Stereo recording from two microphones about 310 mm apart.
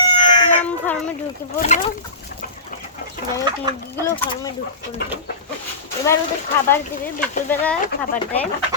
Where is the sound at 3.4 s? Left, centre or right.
Centre.